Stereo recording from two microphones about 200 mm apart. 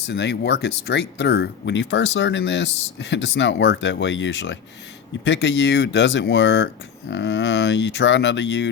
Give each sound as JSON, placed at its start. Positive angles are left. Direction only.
{"t": 0.1, "sound": "speech", "side_deg": 60}